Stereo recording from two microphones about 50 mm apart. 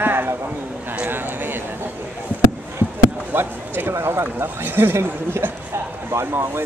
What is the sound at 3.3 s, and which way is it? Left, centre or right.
Basketball bounce, right.